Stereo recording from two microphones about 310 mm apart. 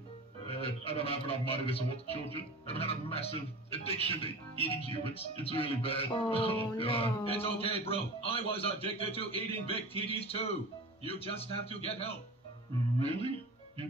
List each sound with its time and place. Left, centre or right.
0.5 s a man's voice: centre